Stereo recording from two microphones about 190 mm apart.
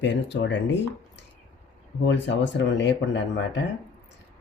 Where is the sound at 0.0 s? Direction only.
70° left (ahead or behind).